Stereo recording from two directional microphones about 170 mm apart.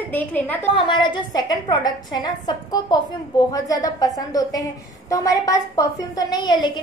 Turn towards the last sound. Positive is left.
turn(degrees=25)  # may be behind; listen again after turning